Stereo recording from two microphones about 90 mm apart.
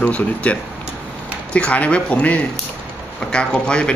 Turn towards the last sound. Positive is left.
turn(degrees=10)  # may be behind; listen again after turning